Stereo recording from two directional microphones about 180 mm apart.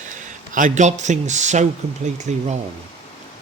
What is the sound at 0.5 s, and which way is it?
A man's voice, 45° right (ahead or behind).